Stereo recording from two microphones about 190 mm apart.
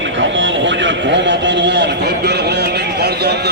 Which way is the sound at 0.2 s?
75° right (ahead or behind).